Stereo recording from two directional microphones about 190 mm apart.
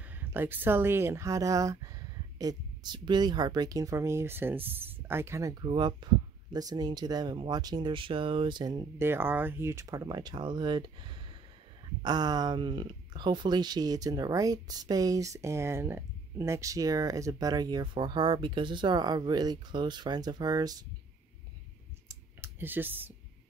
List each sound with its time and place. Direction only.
0.0 s speech: 10° right (ahead or behind)
22.0 s clicking: 15° right (ahead or behind)